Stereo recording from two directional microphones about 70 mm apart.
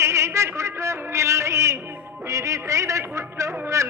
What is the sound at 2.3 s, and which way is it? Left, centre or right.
A man's voice, right.